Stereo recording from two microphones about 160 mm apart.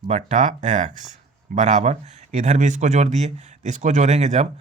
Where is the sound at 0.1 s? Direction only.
45° right (ahead or behind).